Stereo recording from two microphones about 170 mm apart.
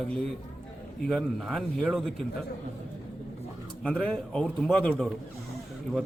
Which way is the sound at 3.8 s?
5° left (ahead or behind).